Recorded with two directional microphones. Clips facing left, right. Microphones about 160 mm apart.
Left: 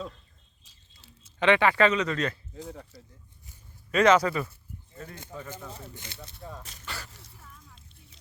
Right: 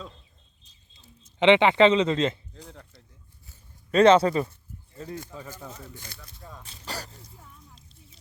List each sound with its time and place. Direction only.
1.4 s speech: 20° right (ahead or behind)
2.5 s speech: 5° left (ahead or behind)
3.9 s speech: 30° right (ahead or behind)
5.5 s speech: 25° left (ahead or behind)
6.7 s speech: 35° right (ahead or behind)
7.1 s speech: 90° left